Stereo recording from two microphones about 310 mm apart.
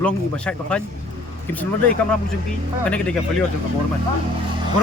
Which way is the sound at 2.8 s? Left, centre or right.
Centre.